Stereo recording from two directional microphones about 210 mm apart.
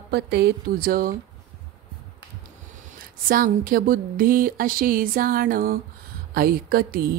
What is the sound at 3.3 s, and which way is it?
Speech, 45° right (ahead or behind).